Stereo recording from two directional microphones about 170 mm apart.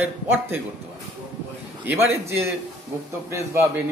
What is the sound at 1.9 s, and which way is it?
A man's voice, 15° right (ahead or behind).